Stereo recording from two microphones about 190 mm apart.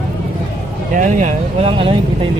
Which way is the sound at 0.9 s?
45° right (ahead or behind).